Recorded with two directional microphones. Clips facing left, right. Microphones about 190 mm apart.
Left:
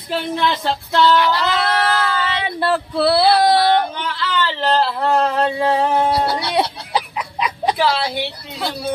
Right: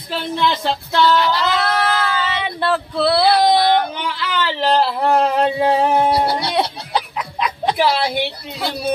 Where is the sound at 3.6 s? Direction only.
15° right (ahead or behind).